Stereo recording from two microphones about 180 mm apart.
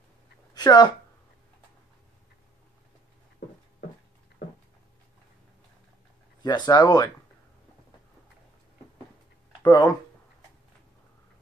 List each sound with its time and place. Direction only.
0.6 s speech: 20° left (ahead or behind)
6.4 s speech: 20° left (ahead or behind)
9.6 s speech: 25° left (ahead or behind)